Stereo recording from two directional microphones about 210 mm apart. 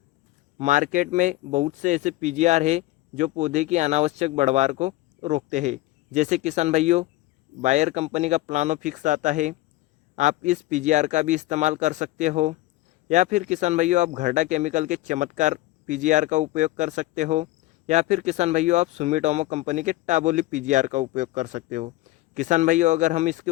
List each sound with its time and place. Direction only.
0.6 s speech: 40° right (ahead or behind)